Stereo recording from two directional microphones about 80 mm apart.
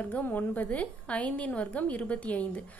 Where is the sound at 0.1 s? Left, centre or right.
Left.